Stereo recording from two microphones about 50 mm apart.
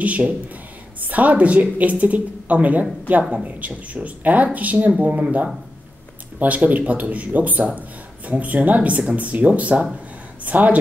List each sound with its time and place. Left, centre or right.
0.0 s a woman's voice: right